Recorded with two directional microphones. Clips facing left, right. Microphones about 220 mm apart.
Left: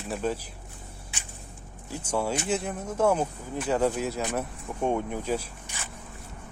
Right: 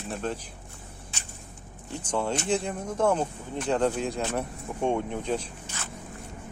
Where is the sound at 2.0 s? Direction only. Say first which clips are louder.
Even; 10° left (ahead or behind).